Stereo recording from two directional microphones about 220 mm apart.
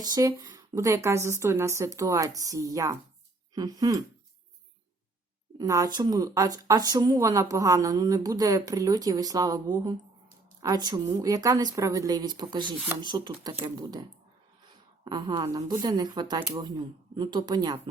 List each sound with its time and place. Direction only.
0.0 s speech: 15° right (ahead or behind)
5.5 s speech: 15° right (ahead or behind)
12.7 s speech: 10° right (ahead or behind)
13.0 s speech: 20° right (ahead or behind)